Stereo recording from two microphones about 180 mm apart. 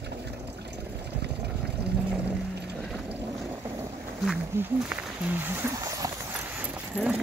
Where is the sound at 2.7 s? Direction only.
Centre (ahead or behind).